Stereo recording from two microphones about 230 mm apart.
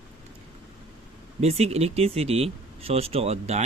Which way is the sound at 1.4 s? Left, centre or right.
Right.